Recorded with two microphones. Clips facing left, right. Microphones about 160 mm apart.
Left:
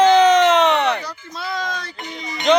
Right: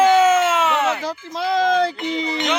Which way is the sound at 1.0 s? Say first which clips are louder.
Right 7 dB; 90° right.